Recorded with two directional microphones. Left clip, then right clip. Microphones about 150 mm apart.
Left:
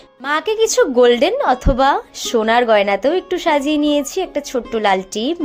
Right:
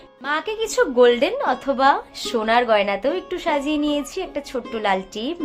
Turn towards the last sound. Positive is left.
turn(degrees=40)  # may be behind; listen again after turning